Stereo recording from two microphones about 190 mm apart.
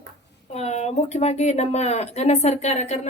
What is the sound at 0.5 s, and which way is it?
A woman's voice, 35° left (ahead or behind).